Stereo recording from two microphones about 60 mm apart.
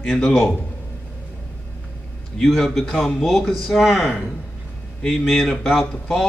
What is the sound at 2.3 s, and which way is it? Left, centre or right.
Speech, centre.